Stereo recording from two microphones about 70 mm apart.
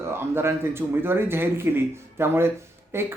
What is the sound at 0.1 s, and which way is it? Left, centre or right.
Speech, right.